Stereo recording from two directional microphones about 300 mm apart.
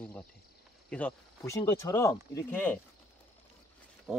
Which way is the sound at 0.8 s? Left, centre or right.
Centre.